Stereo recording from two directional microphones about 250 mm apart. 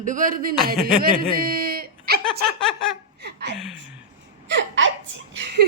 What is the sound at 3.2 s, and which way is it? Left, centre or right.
Speech, right.